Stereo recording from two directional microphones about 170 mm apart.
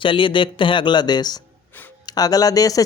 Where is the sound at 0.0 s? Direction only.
30° left (ahead or behind).